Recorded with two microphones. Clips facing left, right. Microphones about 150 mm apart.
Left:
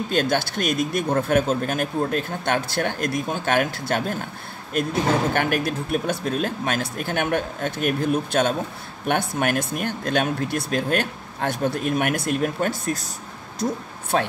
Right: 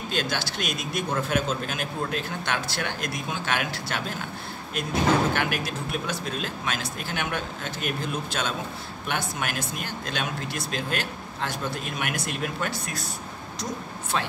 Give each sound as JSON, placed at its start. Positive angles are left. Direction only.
{"t": 0.1, "sound": "speech", "side_deg": 50}
{"t": 5.3, "sound": "speech", "side_deg": 50}
{"t": 14.1, "sound": "speech", "side_deg": 55}